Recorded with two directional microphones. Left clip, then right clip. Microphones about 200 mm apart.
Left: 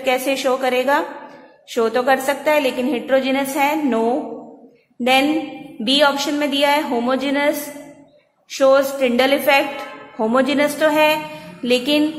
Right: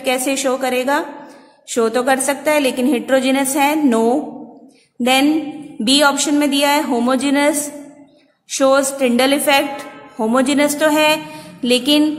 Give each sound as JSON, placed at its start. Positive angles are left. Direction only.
{"t": 0.0, "sound": "a woman's voice", "side_deg": -25}